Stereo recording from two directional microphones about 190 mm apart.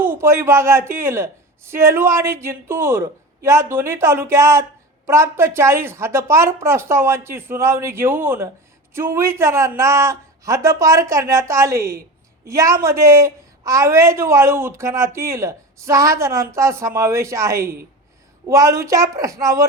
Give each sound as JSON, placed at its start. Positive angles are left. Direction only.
{"t": 0.0, "sound": "speech", "side_deg": -10}